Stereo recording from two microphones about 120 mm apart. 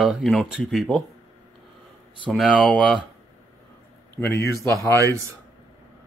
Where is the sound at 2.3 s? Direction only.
Centre (ahead or behind).